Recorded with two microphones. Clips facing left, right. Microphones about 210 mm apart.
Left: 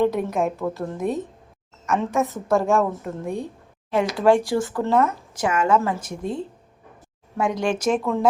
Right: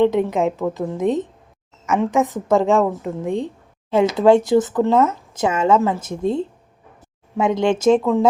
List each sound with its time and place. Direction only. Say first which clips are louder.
0.2 s a woman's voice: right 6 dB; 90° right
0.5 s a woman's voice: right 4 dB; 15° right (ahead or behind)